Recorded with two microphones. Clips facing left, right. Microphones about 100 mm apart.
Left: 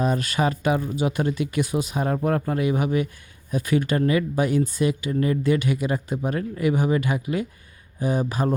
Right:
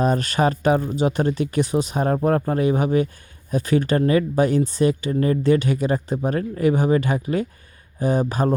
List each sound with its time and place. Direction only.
0.0 s speech: 40° right (ahead or behind)